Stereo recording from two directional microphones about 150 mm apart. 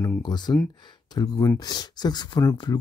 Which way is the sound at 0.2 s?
30° left (ahead or behind).